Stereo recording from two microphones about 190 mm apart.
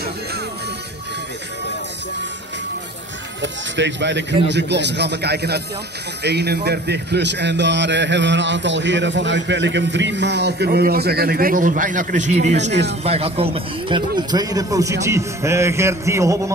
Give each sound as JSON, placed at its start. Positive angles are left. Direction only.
{"t": 3.7, "sound": "a man's voice", "side_deg": -70}